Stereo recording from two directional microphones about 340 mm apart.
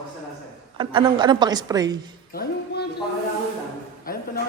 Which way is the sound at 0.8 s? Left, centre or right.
Centre.